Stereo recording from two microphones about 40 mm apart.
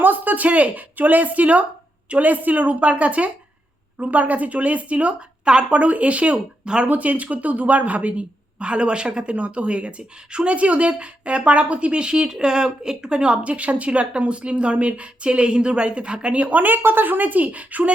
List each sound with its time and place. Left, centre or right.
0.0 s a woman's voice: right
6.3 s speech: right
6.8 s speech: right
13.4 s speech: right